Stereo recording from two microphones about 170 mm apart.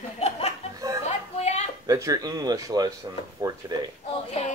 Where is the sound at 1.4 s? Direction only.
40° left (ahead or behind).